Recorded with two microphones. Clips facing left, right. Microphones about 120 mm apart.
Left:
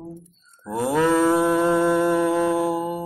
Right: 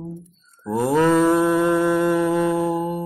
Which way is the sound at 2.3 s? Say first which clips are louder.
Right 1 dB; 5° left (ahead or behind).